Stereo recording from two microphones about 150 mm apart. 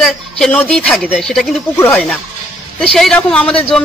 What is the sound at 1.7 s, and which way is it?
Speech, 20° left (ahead or behind).